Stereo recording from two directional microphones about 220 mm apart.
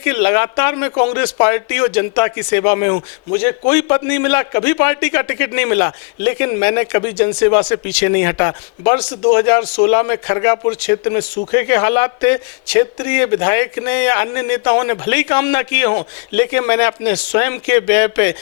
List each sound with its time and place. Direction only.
0.0 s a man's voice: 15° left (ahead or behind)